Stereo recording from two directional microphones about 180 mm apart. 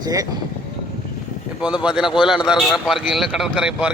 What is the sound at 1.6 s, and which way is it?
A man's voice, 5° right (ahead or behind).